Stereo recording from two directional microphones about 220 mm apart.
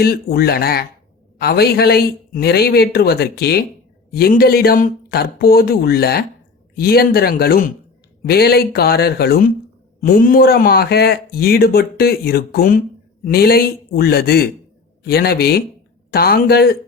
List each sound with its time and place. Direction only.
0.0 s speech: 45° left (ahead or behind)